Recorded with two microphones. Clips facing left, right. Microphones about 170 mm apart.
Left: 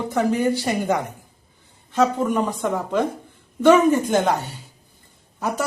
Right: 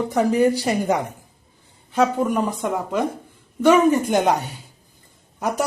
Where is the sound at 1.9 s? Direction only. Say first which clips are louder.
Even; 5° right (ahead or behind).